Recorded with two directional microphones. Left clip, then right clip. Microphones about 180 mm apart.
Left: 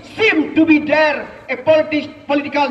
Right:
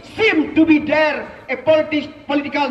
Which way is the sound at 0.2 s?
20° right (ahead or behind).